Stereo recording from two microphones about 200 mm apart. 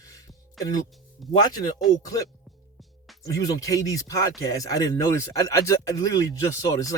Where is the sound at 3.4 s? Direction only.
15° left (ahead or behind).